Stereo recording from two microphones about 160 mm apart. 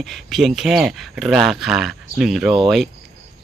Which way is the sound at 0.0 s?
Centre (ahead or behind).